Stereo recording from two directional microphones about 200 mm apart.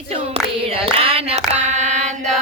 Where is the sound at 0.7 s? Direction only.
30° right (ahead or behind).